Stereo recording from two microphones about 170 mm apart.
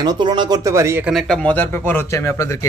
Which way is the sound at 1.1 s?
Centre (ahead or behind).